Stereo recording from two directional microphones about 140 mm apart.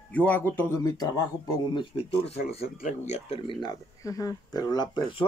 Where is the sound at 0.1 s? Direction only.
10° left (ahead or behind).